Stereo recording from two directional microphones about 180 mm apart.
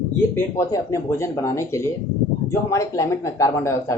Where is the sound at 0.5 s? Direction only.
15° left (ahead or behind).